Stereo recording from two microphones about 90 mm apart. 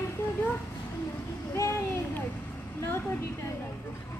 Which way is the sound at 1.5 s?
35° left (ahead or behind).